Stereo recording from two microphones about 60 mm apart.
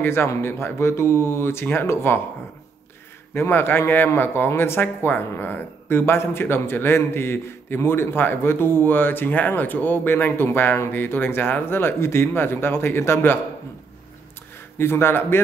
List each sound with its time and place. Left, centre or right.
0.0 s speech: left
3.3 s speech: left
14.8 s speech: left